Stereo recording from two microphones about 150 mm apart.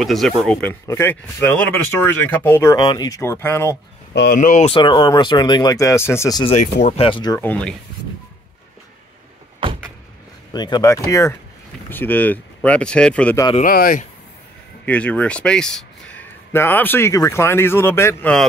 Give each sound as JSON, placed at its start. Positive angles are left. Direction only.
{"t": 0.0, "sound": "speech", "side_deg": 0}
{"t": 2.8, "sound": "speech", "side_deg": 30}
{"t": 4.2, "sound": "speech", "side_deg": 70}
{"t": 4.6, "sound": "speech", "side_deg": 35}
{"t": 6.6, "sound": "speech", "side_deg": 55}
{"t": 7.0, "sound": "speech", "side_deg": 35}
{"t": 7.3, "sound": "speech", "side_deg": 10}
{"t": 10.5, "sound": "speech", "side_deg": 25}
{"t": 13.6, "sound": "speech", "side_deg": 70}
{"t": 14.9, "sound": "speech", "side_deg": 10}